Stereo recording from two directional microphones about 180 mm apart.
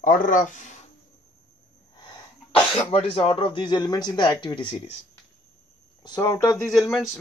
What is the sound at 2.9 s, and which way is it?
Speech, 35° left (ahead or behind).